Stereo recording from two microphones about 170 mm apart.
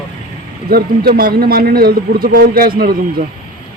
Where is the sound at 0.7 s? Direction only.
65° right (ahead or behind).